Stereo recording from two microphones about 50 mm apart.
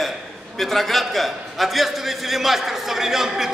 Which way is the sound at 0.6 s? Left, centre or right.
Centre.